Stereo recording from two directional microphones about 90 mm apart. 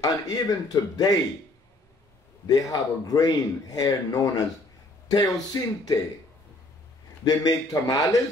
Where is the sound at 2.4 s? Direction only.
45° left (ahead or behind).